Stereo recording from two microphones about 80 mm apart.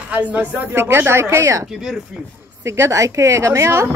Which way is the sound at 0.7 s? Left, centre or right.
Right.